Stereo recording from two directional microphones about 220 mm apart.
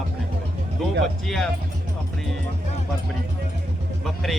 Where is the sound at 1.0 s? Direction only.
Centre (ahead or behind).